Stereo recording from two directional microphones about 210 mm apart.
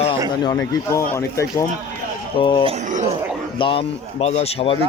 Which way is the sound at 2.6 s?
30° right (ahead or behind).